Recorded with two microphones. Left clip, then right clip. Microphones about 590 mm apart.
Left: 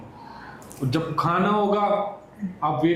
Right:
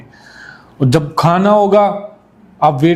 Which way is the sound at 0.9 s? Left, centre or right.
Right.